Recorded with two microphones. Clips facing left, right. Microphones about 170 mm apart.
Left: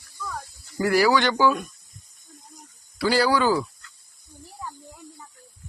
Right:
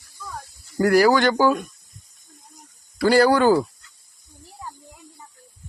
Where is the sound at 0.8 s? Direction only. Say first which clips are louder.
Right 4 dB; 45° right (ahead or behind).